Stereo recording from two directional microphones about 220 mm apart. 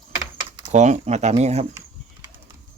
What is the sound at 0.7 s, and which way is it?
Speech, 30° right (ahead or behind).